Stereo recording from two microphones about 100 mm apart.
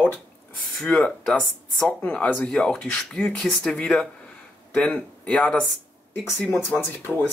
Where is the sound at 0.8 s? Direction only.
10° left (ahead or behind).